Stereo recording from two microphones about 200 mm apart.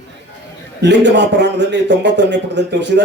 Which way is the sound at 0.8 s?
60° right (ahead or behind).